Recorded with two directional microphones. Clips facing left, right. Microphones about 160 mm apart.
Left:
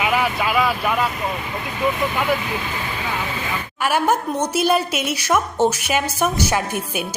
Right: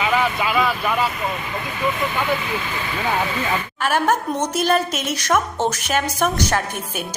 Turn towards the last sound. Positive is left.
turn(degrees=10)  # may be behind; listen again after turning